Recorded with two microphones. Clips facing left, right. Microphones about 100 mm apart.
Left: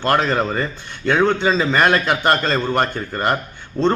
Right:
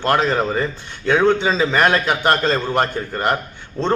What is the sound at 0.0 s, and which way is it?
A man's voice, 5° right (ahead or behind).